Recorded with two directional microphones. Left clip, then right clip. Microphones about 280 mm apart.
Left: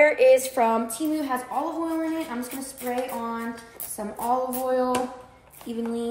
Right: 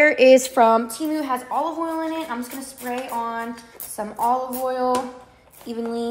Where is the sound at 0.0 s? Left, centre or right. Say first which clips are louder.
Right 4 dB; right.